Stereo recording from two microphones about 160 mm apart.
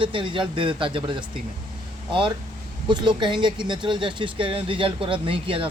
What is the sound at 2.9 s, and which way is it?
Speech, 30° right (ahead or behind).